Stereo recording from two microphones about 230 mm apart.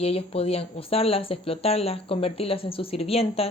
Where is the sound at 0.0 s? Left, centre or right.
Left.